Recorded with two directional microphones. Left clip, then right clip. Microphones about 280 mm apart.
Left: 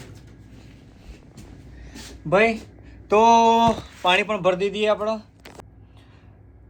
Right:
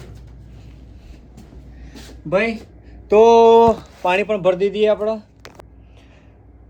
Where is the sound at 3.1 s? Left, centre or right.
Centre.